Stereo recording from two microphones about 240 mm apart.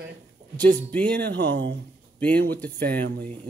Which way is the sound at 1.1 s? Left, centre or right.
Right.